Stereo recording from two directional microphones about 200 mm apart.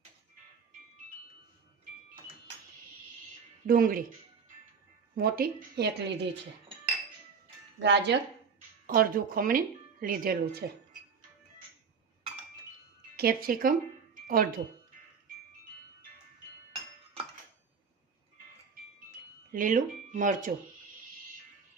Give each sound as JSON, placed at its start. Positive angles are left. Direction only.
{"t": 3.7, "sound": "speech", "side_deg": -45}
{"t": 5.1, "sound": "speech", "side_deg": -50}
{"t": 7.8, "sound": "speech", "side_deg": -60}
{"t": 8.9, "sound": "speech", "side_deg": -45}
{"t": 13.1, "sound": "speech", "side_deg": -45}
{"t": 19.5, "sound": "speech", "side_deg": -40}